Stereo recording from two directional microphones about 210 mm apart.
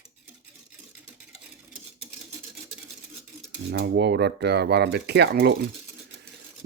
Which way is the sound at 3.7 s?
50° right (ahead or behind).